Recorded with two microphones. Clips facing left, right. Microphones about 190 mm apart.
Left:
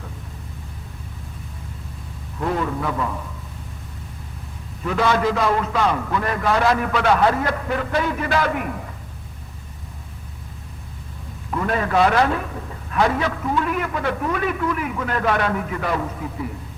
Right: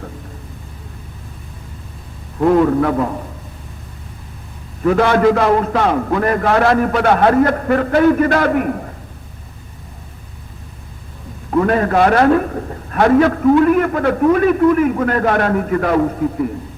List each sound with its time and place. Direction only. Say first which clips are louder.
2.5 s a man's voice: right 11 dB; 55° right (ahead or behind); by 3.2 s 40° right (ahead or behind)
4.9 s a man's voice: right 8 dB; 55° right (ahead or behind)
11.6 s a man's voice: right 4 dB; 50° right (ahead or behind)